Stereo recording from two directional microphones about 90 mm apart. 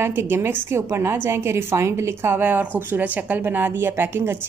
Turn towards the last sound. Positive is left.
turn(degrees=-25)  # may be behind; listen again after turning